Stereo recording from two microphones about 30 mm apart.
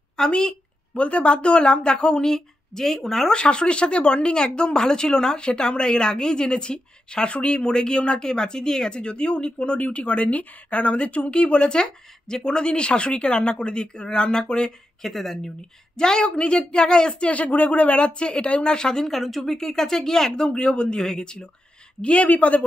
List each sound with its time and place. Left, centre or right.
0.1 s a sound: left
1.0 s speech: left
2.3 s speech: centre
3.3 s speech: left
7.2 s speech: left
7.7 s speech: left
8.9 s speech: left
15.0 s speech: centre
16.0 s speech: left
17.3 s speech: left
19.0 s speech: centre
20.4 s speech: left
21.0 s speech: left
22.0 s speech: left